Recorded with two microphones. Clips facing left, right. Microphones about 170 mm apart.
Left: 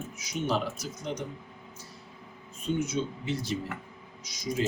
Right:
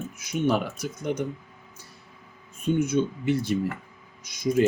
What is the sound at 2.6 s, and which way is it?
Speech, 55° right (ahead or behind).